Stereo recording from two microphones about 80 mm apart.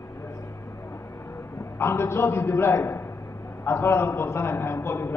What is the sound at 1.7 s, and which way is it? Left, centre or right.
A man's voice, left.